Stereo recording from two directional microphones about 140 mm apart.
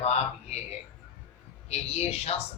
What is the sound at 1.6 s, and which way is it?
Speech, 50° left (ahead or behind).